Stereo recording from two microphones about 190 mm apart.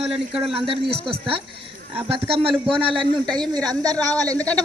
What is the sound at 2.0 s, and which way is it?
A man's voice, 30° right (ahead or behind).